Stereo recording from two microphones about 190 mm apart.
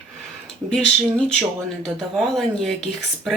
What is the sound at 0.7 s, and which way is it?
Speech, 5° left (ahead or behind).